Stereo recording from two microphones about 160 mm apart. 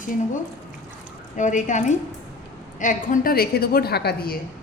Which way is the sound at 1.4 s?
50° left (ahead or behind).